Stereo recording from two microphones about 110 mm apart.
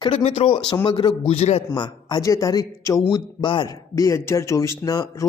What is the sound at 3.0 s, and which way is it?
Speech, 50° left (ahead or behind).